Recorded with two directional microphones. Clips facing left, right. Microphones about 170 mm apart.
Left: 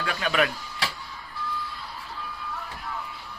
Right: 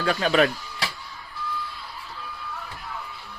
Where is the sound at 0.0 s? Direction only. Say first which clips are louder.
Right 5 dB; 35° right (ahead or behind).